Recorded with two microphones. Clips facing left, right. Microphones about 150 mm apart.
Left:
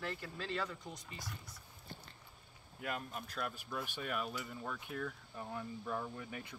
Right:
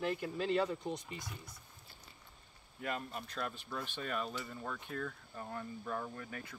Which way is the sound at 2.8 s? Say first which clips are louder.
Right 2 dB; centre (ahead or behind).